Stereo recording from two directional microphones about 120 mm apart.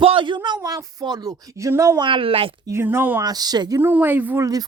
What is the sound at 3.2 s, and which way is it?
Speech, 35° right (ahead or behind).